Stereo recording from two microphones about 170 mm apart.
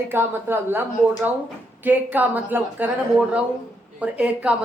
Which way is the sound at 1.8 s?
10° right (ahead or behind).